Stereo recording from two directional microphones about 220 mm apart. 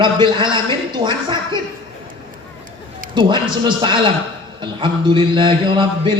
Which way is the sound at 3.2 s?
20° right (ahead or behind).